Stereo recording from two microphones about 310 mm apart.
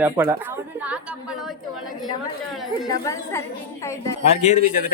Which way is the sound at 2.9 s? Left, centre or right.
Centre.